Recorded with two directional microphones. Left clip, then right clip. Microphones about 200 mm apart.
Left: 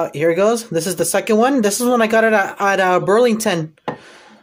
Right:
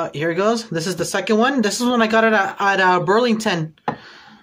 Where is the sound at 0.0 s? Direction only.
20° left (ahead or behind).